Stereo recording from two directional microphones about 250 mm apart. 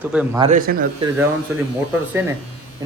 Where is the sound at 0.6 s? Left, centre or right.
Right.